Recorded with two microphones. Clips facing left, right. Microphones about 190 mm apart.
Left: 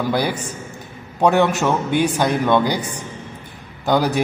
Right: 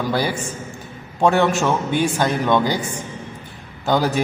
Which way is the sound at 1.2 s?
10° left (ahead or behind).